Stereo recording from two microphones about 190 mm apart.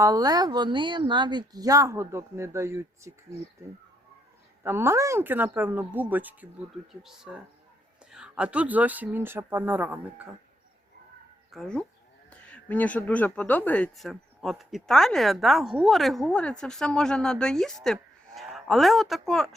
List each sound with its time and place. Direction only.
0.0 s a woman's voice: 20° right (ahead or behind)
4.6 s speech: 15° right (ahead or behind)
11.5 s speech: 5° left (ahead or behind)